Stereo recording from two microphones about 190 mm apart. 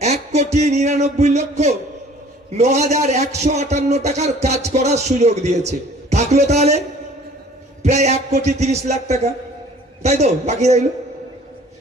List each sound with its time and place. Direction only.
0.0 s a man's voice: 35° right (ahead or behind)